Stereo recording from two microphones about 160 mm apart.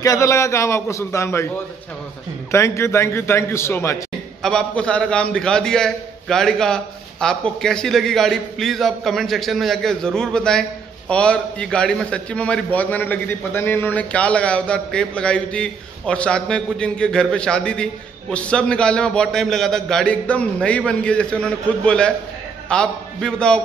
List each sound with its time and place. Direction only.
0.0 s a man's voice: 20° left (ahead or behind)
2.5 s a man's voice: 15° left (ahead or behind)
4.4 s a man's voice: 5° left (ahead or behind)